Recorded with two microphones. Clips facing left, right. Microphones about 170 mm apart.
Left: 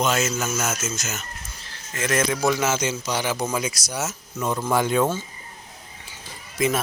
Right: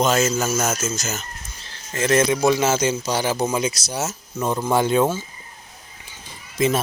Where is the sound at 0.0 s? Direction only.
35° right (ahead or behind).